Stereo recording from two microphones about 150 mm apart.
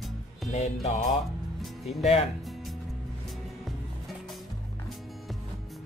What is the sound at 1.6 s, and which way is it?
Music, centre (ahead or behind).